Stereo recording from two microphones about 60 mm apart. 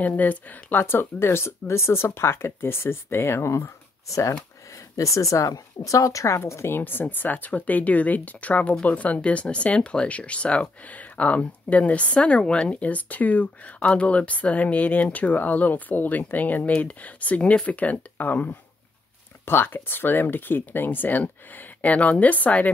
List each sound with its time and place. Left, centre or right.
0.0 s a woman's voice: left
6.8 s speech: left